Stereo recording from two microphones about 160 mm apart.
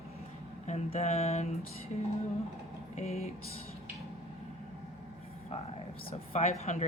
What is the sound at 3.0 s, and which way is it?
Speech, 40° left (ahead or behind).